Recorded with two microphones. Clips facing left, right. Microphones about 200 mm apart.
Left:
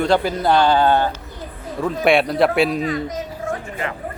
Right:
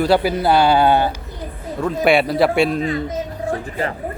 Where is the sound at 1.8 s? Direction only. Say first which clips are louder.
Right 1 dB; centre (ahead or behind).